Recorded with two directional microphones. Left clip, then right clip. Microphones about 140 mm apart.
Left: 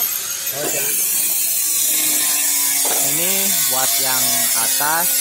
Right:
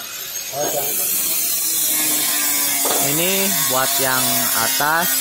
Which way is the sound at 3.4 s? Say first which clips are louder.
Right 1 dB; 15° right (ahead or behind).